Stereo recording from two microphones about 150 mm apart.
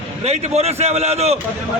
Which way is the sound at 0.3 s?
45° right (ahead or behind).